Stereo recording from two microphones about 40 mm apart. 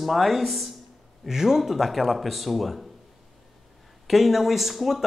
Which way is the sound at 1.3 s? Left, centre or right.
Centre.